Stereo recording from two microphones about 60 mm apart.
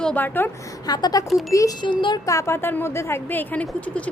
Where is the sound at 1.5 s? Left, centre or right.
Left.